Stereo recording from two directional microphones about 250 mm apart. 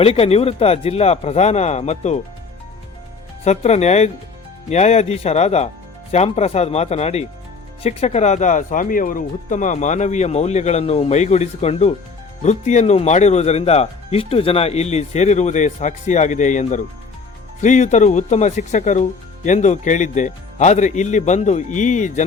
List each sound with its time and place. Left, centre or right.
0.0 s speech: left
3.4 s speech: left